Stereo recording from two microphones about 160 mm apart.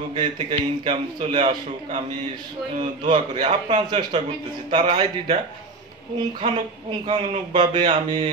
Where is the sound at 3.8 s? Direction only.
30° right (ahead or behind).